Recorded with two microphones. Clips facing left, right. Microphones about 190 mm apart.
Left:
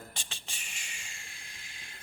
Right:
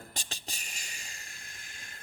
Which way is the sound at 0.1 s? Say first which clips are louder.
Right 3 dB; 40° right (ahead or behind).